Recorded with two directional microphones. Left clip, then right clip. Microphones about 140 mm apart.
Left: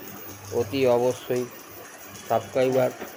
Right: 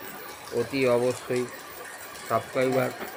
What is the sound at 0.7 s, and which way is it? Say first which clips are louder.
Speech: left 2 dB; 35° left (ahead or behind).